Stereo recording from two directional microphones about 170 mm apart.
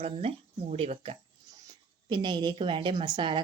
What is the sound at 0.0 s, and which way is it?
Speech, 35° right (ahead or behind).